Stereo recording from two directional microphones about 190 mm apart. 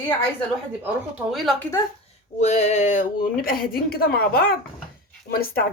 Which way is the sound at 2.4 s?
35° left (ahead or behind).